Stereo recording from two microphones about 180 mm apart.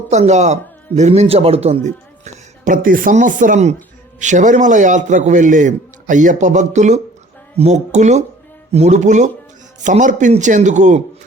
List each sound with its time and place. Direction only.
0.1 s speech: 40° right (ahead or behind)
2.2 s a man's voice: 50° right (ahead or behind)